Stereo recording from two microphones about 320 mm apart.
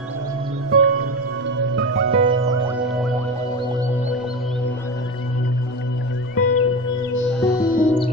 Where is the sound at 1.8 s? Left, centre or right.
Right.